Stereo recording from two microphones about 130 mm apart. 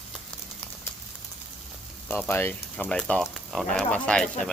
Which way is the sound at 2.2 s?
15° left (ahead or behind).